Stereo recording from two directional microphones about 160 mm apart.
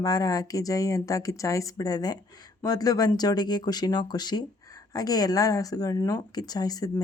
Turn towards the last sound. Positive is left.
turn(degrees=25)  # may be behind; listen again after turning